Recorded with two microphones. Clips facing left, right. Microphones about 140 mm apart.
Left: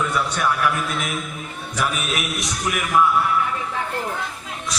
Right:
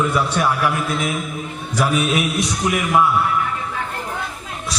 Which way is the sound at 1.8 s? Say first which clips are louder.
Right 6 dB; 30° right (ahead or behind).